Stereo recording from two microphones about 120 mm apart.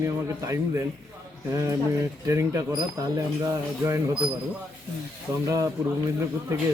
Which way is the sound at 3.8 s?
25° right (ahead or behind).